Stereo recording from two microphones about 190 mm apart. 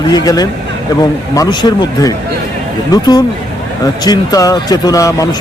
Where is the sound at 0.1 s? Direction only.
20° left (ahead or behind).